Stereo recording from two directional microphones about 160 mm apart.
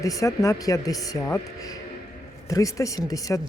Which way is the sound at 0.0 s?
20° left (ahead or behind).